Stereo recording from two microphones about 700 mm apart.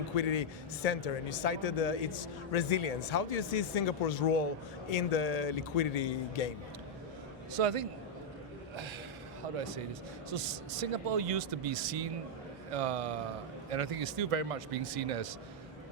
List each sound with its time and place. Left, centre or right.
0.2 s speech: left
7.5 s speech: right
10.2 s speech: right